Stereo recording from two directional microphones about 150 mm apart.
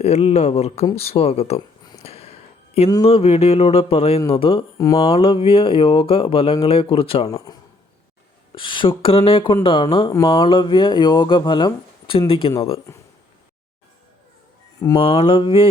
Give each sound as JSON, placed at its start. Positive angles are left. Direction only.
{"t": 0.0, "sound": "a man's voice", "side_deg": 45}
{"t": 2.0, "sound": "a sound", "side_deg": 45}
{"t": 3.0, "sound": "speech", "side_deg": 40}
{"t": 7.3, "sound": "a man's voice", "side_deg": 25}
{"t": 14.9, "sound": "speech", "side_deg": 40}